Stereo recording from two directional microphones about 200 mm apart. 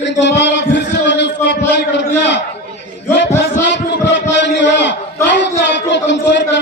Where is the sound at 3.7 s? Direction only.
60° left (ahead or behind).